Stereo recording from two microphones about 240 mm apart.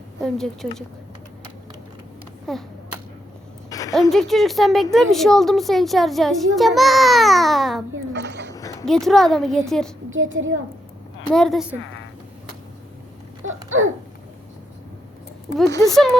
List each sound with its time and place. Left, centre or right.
0.2 s a child's voice: centre
2.5 s a child's voice: centre
3.7 s a sound: centre
4.1 s a child's voice: centre
8.1 s a sound: right
8.8 s a child's voice: centre
10.1 s a child's voice: right
11.3 s a child's voice: centre
13.7 s babbling: right
15.7 s speech: centre